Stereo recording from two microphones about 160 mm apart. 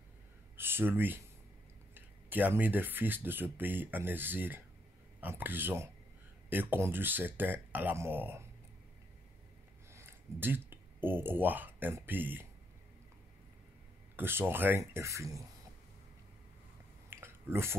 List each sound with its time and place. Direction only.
0.6 s speech: 15° right (ahead or behind)
9.9 s speech: 15° right (ahead or behind)
14.1 s speech: 15° right (ahead or behind)
17.1 s a sound: 15° right (ahead or behind)